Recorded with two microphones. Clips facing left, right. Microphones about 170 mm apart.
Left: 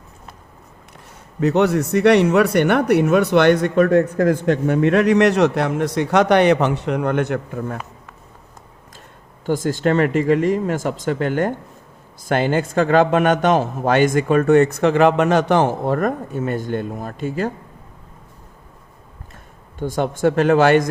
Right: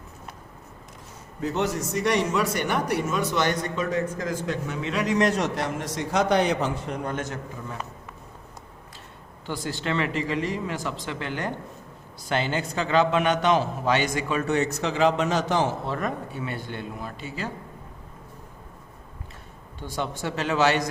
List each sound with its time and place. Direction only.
1.4 s speech: 70° left (ahead or behind)
9.5 s a man's voice: 45° left (ahead or behind)
19.8 s a man's voice: 50° left (ahead or behind)